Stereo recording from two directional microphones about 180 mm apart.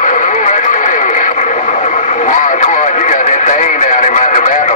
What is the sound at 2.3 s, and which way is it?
Radio, 45° left (ahead or behind).